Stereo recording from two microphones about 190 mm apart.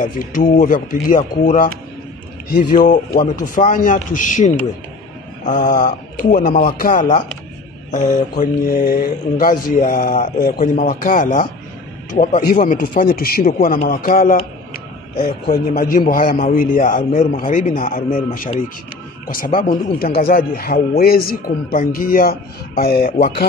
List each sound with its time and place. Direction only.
0.0 s a man's voice: 45° left (ahead or behind)
7.9 s mantra: 40° left (ahead or behind)
8.7 s a man's voice: 55° left (ahead or behind)